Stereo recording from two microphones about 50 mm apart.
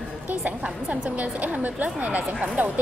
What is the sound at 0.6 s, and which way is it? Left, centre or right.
A woman's voice, right.